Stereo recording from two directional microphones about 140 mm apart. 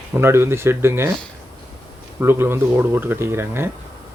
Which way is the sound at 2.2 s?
15° right (ahead or behind).